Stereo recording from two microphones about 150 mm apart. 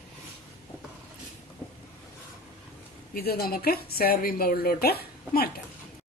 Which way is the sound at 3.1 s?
90° left.